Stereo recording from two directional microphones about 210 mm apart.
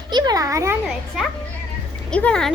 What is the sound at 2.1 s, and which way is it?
Speech, 5° left (ahead or behind).